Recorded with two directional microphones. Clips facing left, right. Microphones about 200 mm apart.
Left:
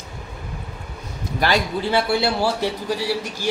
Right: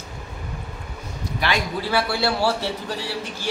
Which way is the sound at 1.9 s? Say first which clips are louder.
Left 3 dB; 20° left (ahead or behind).